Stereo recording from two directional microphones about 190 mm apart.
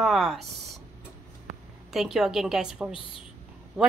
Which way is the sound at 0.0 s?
Centre (ahead or behind).